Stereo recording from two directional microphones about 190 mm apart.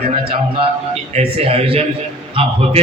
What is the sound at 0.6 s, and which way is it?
A man's voice, 30° right (ahead or behind).